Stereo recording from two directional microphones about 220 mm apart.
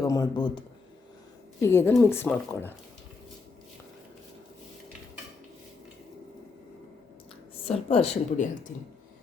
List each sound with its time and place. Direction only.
0.0 s speech: 15° left (ahead or behind)
1.6 s speech: 10° left (ahead or behind)
7.7 s speech: 25° left (ahead or behind)